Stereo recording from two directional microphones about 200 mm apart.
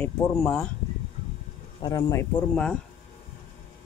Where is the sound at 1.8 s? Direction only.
20° left (ahead or behind).